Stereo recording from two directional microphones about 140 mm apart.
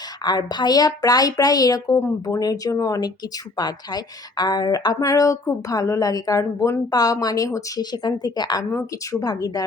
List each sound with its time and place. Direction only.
0.2 s a woman's voice: 30° left (ahead or behind)